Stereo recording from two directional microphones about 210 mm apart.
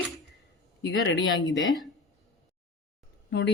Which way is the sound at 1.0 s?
60° left (ahead or behind).